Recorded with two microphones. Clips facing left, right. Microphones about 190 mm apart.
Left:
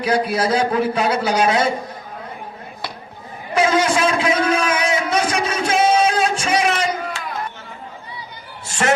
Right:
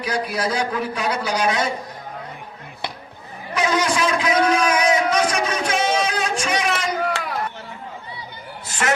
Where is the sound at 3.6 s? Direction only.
30° left (ahead or behind).